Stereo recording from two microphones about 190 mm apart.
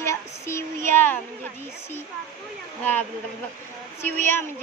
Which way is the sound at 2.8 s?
10° left (ahead or behind).